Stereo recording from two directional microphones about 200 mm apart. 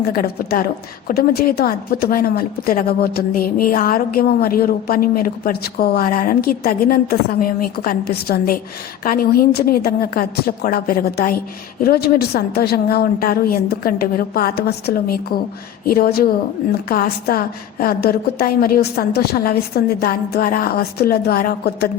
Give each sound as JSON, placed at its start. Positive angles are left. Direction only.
{"t": 0.1, "sound": "a woman's voice", "side_deg": 45}